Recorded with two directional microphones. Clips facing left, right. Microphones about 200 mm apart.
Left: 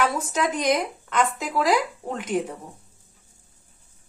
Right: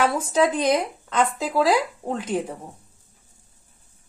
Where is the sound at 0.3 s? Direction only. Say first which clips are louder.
Right 3 dB; 30° right (ahead or behind).